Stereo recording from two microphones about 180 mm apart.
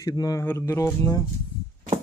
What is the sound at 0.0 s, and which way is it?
Speech, 20° left (ahead or behind).